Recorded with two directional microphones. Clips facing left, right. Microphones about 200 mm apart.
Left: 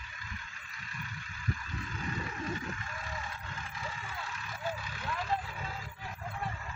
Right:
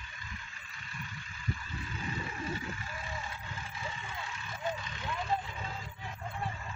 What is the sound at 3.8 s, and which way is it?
Vehicle, centre (ahead or behind).